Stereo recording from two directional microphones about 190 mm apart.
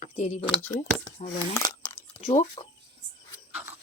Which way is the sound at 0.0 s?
35° left (ahead or behind).